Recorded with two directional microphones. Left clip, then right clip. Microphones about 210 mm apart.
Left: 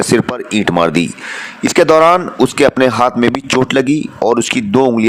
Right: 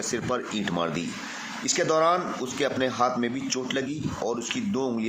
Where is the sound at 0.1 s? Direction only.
50° left (ahead or behind).